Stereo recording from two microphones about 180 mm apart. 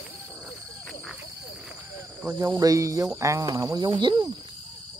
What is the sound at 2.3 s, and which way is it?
Speech, 20° right (ahead or behind).